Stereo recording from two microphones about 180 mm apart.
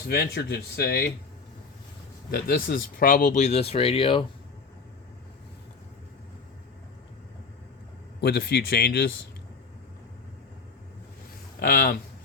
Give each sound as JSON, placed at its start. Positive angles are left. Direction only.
{"t": 0.1, "sound": "speech", "side_deg": 65}
{"t": 2.3, "sound": "speech", "side_deg": 55}
{"t": 8.2, "sound": "speech", "side_deg": 65}
{"t": 11.6, "sound": "speech", "side_deg": 55}